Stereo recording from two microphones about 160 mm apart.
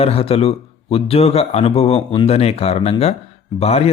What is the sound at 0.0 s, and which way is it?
Speech, 40° left (ahead or behind).